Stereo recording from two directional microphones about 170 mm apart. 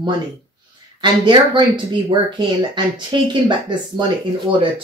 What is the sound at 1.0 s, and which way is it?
Speech, 30° right (ahead or behind).